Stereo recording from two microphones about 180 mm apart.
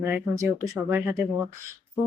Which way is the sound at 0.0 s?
15° right (ahead or behind).